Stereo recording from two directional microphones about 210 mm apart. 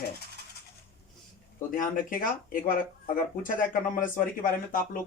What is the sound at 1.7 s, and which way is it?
A man's voice, 40° left (ahead or behind).